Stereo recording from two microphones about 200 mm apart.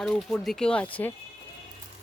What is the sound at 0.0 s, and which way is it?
Speech, centre (ahead or behind).